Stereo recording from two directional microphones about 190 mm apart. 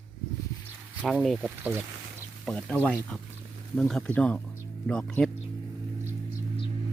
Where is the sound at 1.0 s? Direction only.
Centre (ahead or behind).